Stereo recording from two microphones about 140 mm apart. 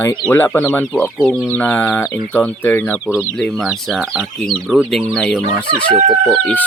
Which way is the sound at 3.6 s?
Centre (ahead or behind).